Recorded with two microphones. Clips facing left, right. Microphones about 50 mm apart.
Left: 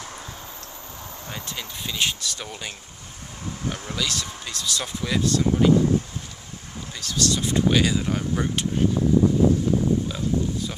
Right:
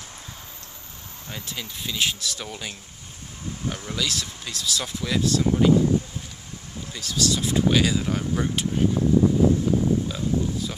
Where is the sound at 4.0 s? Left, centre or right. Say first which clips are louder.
Even; centre.